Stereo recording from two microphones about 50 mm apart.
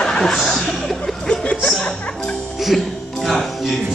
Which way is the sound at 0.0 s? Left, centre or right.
Centre.